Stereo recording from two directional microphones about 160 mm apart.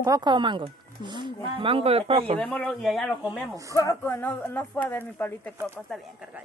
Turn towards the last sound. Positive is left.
turn(degrees=10)  # may be behind; listen again after turning